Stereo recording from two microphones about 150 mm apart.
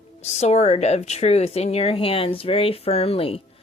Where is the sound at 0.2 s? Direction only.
50° left (ahead or behind).